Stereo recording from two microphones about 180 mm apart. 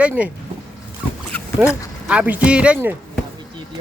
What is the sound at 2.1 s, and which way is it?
Speech, 10° right (ahead or behind).